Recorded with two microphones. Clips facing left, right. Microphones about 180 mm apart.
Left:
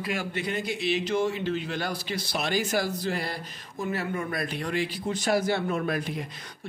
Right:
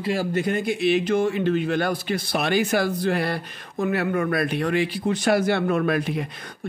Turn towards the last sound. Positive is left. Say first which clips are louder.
# right 6 dB
turn(degrees=-60)  # may be behind; listen again after turning